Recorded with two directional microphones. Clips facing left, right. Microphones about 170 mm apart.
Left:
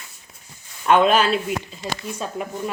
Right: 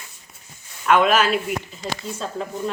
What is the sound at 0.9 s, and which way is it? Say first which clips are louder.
Speech: left 1 dB; 30° left (ahead or behind).